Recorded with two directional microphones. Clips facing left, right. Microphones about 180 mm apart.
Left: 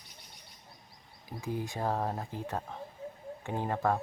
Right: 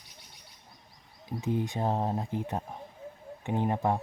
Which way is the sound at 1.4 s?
20° right (ahead or behind).